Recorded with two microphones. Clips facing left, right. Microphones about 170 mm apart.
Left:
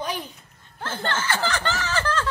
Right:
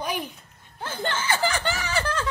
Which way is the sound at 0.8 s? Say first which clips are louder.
Left 1 dB; 15° right (ahead or behind).